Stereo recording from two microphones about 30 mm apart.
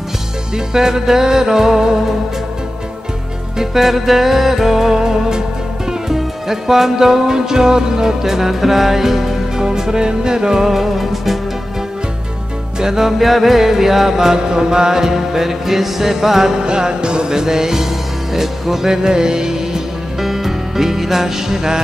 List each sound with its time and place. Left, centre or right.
0.7 s music: centre
3.7 s music: centre; by 10.6 s right
10.6 s music: centre
12.8 s music: centre
13.2 s music: centre
16.5 s music: right
20.2 s music: centre